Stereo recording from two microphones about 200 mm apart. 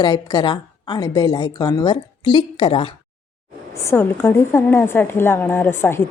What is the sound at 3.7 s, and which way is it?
A woman's voice, 15° left (ahead or behind).